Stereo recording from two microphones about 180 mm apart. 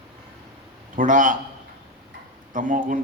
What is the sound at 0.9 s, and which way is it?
Speech, 45° right (ahead or behind).